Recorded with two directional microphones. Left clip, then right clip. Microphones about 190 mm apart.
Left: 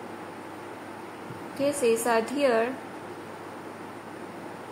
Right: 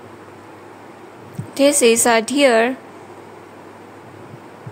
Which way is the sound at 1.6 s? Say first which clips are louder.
Right 11 dB; 60° right (ahead or behind).